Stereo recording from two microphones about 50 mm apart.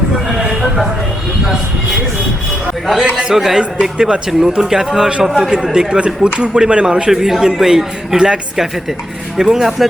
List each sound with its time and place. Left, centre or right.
2.8 s speech: centre
3.2 s speech: centre
7.1 s speech: centre